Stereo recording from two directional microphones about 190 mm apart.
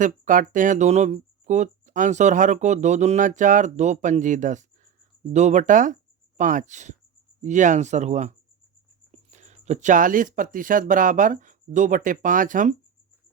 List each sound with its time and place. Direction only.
0.0 s speech: 45° right (ahead or behind)